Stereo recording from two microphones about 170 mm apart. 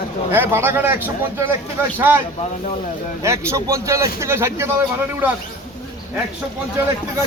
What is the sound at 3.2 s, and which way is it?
A man's voice, 15° right (ahead or behind).